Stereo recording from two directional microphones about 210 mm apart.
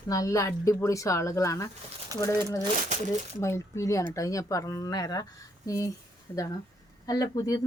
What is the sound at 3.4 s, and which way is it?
Speech, 15° left (ahead or behind).